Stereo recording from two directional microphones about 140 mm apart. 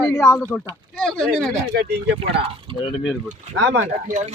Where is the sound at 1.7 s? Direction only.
90° right.